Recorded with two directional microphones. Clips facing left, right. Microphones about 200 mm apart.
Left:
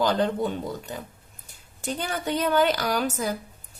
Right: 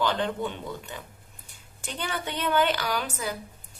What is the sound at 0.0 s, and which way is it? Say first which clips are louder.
Speech: left 4 dB; 40° left (ahead or behind).